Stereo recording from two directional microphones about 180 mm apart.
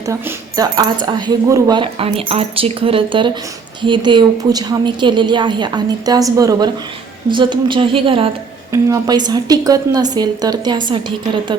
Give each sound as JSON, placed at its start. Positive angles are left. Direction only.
{"t": 0.0, "sound": "speech", "side_deg": -20}